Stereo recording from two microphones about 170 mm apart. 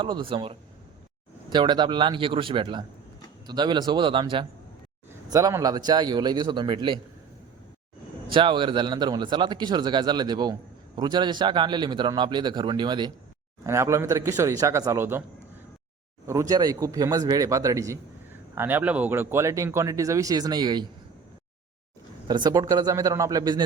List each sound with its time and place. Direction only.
0.0 s speech: 30° right (ahead or behind)
5.3 s speech: 20° right (ahead or behind)
8.3 s speech: 30° right (ahead or behind); by 15.2 s 15° right (ahead or behind)
16.2 s speech: 20° right (ahead or behind)
22.3 s speech: 25° right (ahead or behind)